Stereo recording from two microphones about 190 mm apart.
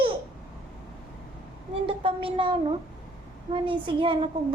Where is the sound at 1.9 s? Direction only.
30° right (ahead or behind).